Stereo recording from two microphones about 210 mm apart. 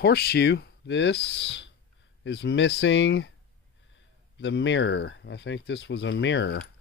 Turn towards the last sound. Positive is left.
turn(degrees=55)  # may be behind; listen again after turning